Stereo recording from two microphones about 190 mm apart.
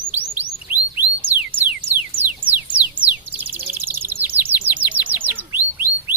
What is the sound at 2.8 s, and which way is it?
Bird, 10° right (ahead or behind).